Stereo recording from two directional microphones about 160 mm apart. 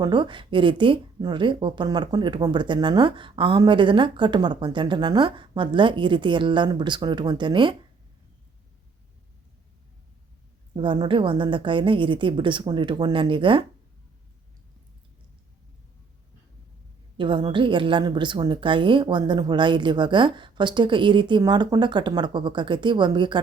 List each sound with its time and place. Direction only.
0.0 s a woman's voice: 30° right (ahead or behind)
10.8 s a woman's voice: 30° right (ahead or behind)
17.2 s a woman's voice: 30° right (ahead or behind)